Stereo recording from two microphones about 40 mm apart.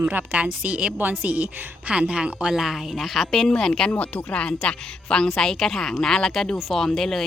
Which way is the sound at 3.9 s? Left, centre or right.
Left.